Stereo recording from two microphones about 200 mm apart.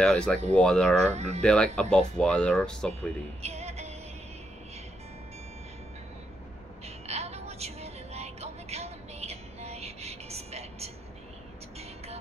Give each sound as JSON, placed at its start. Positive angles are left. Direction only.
{"t": 0.0, "sound": "speech", "side_deg": 5}
{"t": 1.0, "sound": "speech", "side_deg": -35}
{"t": 1.4, "sound": "speech", "side_deg": 5}
{"t": 3.4, "sound": "music", "side_deg": -30}
{"t": 7.1, "sound": "music", "side_deg": -30}